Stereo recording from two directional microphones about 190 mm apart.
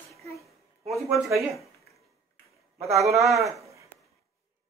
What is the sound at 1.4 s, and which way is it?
Speech, centre (ahead or behind).